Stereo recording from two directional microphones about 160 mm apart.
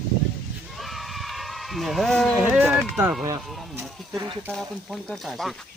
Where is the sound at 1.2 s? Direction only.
Centre (ahead or behind).